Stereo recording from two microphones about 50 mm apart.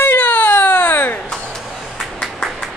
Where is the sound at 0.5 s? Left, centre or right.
Left.